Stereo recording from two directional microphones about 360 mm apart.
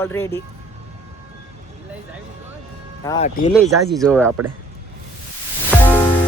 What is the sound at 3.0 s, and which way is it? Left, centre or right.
Speech, centre.